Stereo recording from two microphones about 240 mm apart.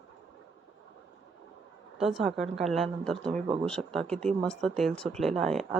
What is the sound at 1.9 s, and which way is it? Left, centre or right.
Speech, centre.